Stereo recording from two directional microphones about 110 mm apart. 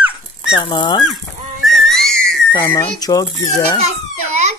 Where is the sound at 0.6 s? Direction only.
45° left (ahead or behind).